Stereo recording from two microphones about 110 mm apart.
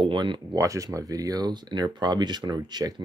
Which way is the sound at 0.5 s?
30° right (ahead or behind).